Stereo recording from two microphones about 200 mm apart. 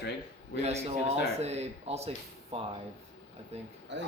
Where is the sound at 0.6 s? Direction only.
30° right (ahead or behind).